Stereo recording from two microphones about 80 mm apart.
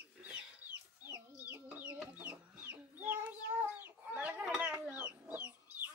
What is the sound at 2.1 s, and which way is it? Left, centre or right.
Chicken, right.